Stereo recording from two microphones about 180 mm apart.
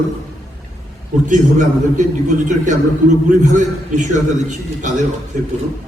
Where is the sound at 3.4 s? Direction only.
40° right (ahead or behind).